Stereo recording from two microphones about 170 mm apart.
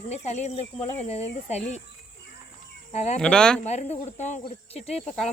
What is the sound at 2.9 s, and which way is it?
Speech, 40° left (ahead or behind).